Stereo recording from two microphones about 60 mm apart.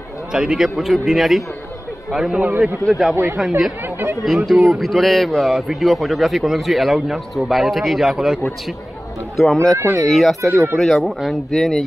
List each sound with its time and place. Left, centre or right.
0.3 s speech: centre
3.8 s speech: right
4.2 s speech: centre
9.4 s speech: centre
9.8 s speech: right
10.1 s speech: centre